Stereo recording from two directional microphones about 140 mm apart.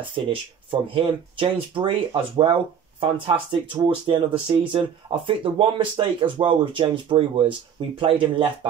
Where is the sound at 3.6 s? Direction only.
35° right (ahead or behind).